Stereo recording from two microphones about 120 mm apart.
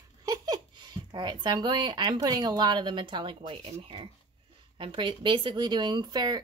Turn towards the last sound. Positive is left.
turn(degrees=-35)  # may be behind; listen again after turning